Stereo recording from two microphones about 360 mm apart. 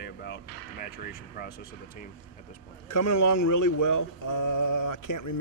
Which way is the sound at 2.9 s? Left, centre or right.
Left.